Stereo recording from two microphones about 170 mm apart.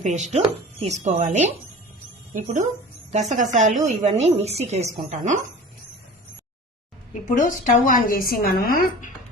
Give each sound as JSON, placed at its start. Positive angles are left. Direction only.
{"t": 0.0, "sound": "a woman's voice", "side_deg": -45}
{"t": 7.1, "sound": "a woman's voice", "side_deg": 50}